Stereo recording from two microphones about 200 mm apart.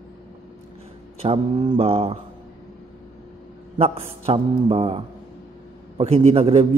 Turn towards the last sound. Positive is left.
turn(degrees=-30)  # may be behind; listen again after turning